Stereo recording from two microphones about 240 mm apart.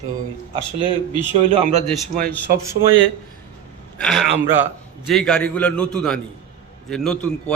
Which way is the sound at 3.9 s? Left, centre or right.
Centre.